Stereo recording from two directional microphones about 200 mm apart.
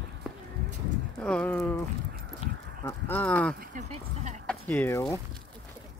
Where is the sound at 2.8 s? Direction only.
10° left (ahead or behind).